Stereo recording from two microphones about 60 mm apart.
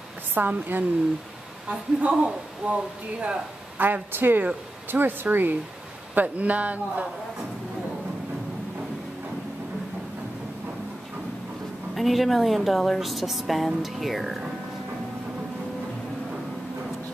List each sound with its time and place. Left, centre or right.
0.3 s speech: right
1.7 s speech: centre
3.8 s speech: right
11.9 s speech: centre